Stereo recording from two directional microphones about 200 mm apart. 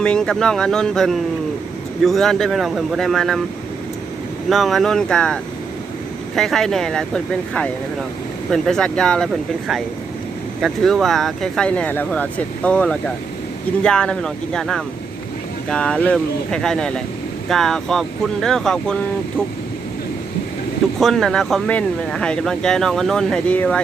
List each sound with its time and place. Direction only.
0.0 s speech: 5° left (ahead or behind)
4.4 s speech: centre (ahead or behind)
21.0 s speech: centre (ahead or behind)